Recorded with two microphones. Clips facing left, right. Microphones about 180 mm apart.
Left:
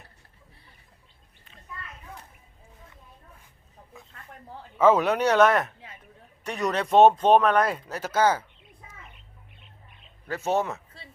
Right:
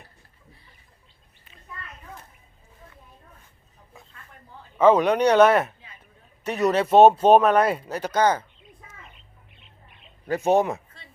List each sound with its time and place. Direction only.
4.8 s speech: 5° left (ahead or behind)
8.8 s bird: 25° left (ahead or behind)
10.2 s speech: 15° right (ahead or behind)